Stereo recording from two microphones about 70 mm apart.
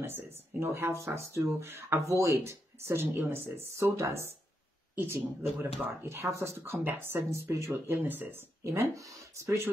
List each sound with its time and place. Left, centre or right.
0.0 s speech: right
8.9 s speech: right